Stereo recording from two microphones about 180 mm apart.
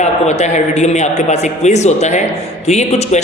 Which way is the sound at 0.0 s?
40° left (ahead or behind).